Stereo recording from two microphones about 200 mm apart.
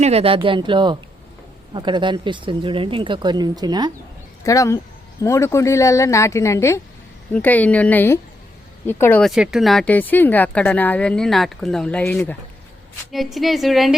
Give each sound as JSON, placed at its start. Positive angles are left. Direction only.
{"t": 0.0, "sound": "speech", "side_deg": -30}
{"t": 4.4, "sound": "speech", "side_deg": 15}
{"t": 9.3, "sound": "a woman's voice", "side_deg": 0}